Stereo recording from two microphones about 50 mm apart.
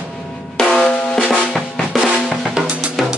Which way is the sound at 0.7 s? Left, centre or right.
Centre.